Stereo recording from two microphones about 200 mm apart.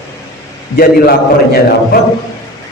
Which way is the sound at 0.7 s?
50° left (ahead or behind).